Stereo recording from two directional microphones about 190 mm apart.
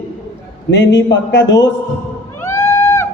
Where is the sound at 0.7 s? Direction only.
70° left (ahead or behind).